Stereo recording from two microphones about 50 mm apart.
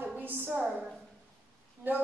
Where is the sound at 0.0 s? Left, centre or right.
Right.